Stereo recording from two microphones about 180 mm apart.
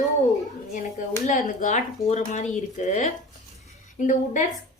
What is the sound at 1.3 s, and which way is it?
A woman's voice, 45° left (ahead or behind).